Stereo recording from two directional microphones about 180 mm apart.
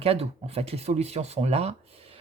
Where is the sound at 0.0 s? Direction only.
35° right (ahead or behind).